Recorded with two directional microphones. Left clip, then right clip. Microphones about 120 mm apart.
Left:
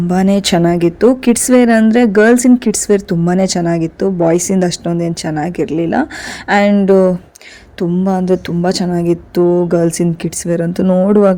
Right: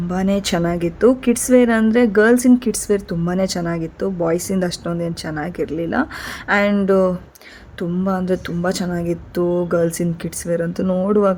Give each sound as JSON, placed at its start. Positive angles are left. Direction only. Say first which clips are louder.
{"t": 0.1, "sound": "a woman's voice", "louder": "left 7 dB", "side_deg": 45}